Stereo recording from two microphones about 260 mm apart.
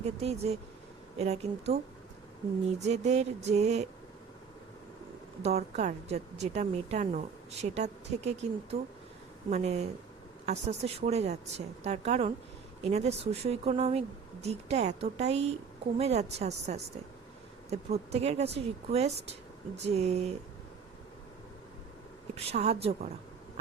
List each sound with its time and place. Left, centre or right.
0.0 s speech: right
2.8 s speech: right
5.4 s speech: right
22.4 s speech: right